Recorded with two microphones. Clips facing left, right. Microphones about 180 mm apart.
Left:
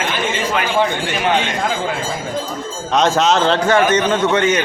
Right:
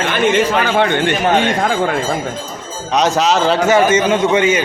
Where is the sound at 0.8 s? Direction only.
65° right (ahead or behind).